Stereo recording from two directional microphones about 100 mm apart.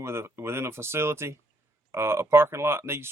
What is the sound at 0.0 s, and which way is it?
Speech, 25° right (ahead or behind).